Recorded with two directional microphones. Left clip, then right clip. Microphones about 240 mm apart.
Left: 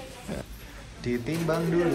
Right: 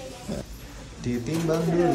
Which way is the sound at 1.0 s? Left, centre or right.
Centre.